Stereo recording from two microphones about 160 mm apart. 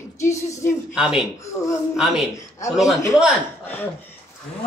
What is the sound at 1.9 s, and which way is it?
Speech, centre (ahead or behind).